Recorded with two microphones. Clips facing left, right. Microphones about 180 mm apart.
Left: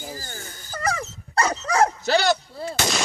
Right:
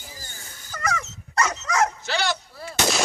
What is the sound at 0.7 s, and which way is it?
Dog, 30° left (ahead or behind).